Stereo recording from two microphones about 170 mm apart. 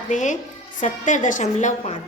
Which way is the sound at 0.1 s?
45° left (ahead or behind).